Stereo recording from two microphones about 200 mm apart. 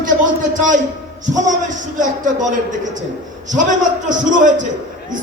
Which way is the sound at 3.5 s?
40° right (ahead or behind).